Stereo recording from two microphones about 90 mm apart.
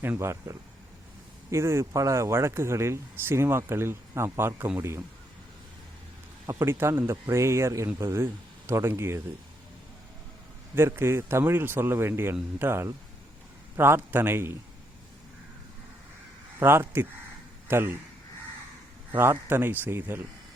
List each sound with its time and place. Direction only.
0.0 s speech: 30° right (ahead or behind)
6.6 s speech: 25° right (ahead or behind)
10.8 s speech: 25° right (ahead or behind)
16.6 s speech: 25° right (ahead or behind)
19.1 s speech: 25° right (ahead or behind)